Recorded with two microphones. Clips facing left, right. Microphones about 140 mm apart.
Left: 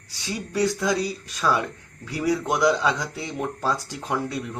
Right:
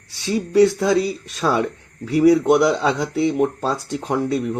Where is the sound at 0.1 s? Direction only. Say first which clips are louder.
Right 10 dB; 25° right (ahead or behind).